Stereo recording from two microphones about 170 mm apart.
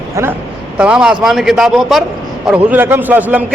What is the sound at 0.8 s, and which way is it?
A man's voice, 5° right (ahead or behind).